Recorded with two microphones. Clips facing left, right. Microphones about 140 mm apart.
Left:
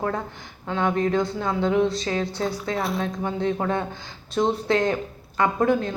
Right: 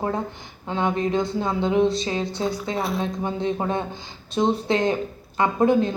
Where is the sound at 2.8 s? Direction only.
Centre (ahead or behind).